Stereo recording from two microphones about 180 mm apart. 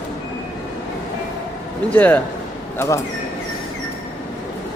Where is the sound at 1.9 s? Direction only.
10° left (ahead or behind).